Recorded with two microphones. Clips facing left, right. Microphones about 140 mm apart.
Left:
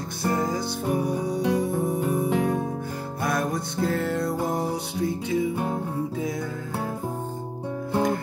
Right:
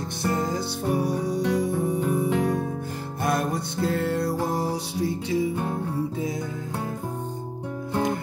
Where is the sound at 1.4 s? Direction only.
10° left (ahead or behind).